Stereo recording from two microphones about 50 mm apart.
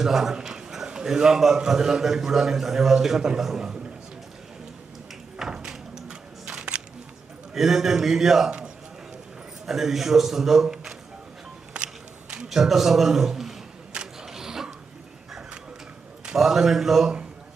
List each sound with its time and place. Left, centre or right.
0.0 s a man's voice: centre
5.4 s a sound: centre
7.5 s a man's voice: centre
8.4 s a man's voice: centre
9.6 s a man's voice: centre
12.5 s a man's voice: centre
13.9 s camera: centre
14.3 s a sound: centre
16.3 s a man's voice: centre